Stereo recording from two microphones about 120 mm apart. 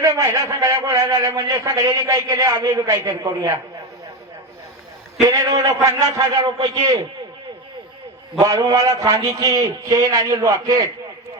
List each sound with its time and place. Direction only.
0.0 s a man's voice: 25° right (ahead or behind)
5.2 s a man's voice: 25° right (ahead or behind)
8.4 s a man's voice: 30° right (ahead or behind)